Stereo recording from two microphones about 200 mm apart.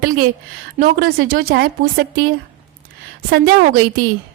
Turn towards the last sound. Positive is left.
turn(degrees=-50)  # may be behind; listen again after turning